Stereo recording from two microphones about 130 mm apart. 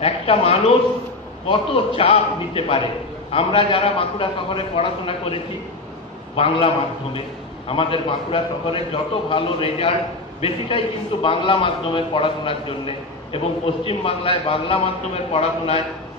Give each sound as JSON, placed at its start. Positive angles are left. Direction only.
{"t": 0.0, "sound": "a man's voice", "side_deg": 50}
{"t": 11.2, "sound": "a man's voice", "side_deg": 45}